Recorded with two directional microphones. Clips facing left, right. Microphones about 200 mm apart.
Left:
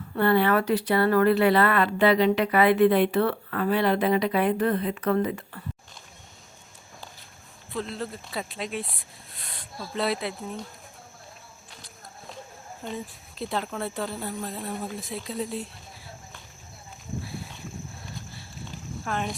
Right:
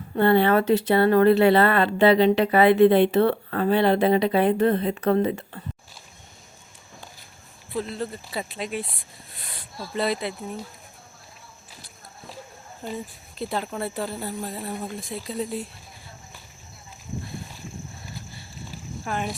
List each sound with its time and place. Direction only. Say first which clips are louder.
0.2 s speech: right 3 dB; 25° right (ahead or behind)
7.7 s speech: right 3 dB; 5° right (ahead or behind)
12.8 s speech: right 2 dB; centre (ahead or behind)
17.2 s a sound: right 1 dB; 5° left (ahead or behind)
19.0 s speech: right 1 dB; 5° right (ahead or behind)